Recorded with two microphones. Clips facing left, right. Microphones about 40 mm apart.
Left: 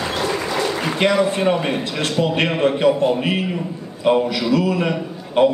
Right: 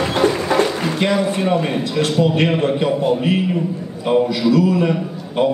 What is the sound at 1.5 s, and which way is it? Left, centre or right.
Speech, centre.